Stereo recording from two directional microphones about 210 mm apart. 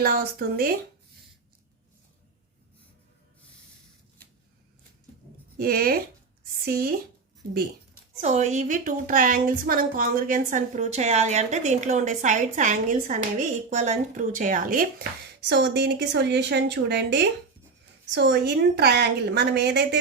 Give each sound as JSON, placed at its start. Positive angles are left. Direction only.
{"t": 0.0, "sound": "a woman's voice", "side_deg": -45}
{"t": 5.5, "sound": "a woman's voice", "side_deg": -45}
{"t": 8.2, "sound": "a woman's voice", "side_deg": -35}